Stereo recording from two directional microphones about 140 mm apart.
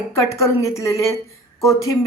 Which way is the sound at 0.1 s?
20° left (ahead or behind).